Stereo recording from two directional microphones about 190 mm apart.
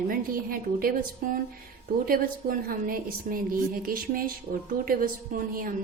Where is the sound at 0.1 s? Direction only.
50° right (ahead or behind).